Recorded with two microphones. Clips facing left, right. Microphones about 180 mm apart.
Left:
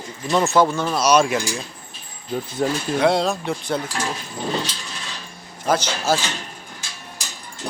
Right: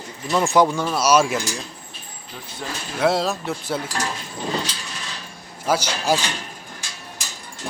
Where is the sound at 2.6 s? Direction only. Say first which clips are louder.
Left 10 dB; 45° left (ahead or behind).